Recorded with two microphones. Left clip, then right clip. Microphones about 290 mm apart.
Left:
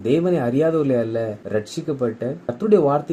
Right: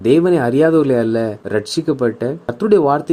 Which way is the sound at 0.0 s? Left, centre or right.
Right.